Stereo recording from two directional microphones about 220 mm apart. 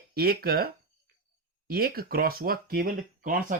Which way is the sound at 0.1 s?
45° right (ahead or behind).